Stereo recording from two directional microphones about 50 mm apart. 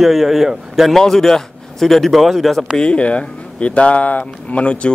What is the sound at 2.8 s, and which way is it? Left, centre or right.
Speech, left.